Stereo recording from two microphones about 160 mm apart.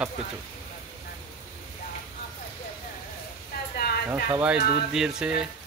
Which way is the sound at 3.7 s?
85° left.